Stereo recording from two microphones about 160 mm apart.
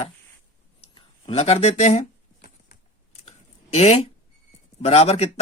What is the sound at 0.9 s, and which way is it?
Speech, 40° left (ahead or behind).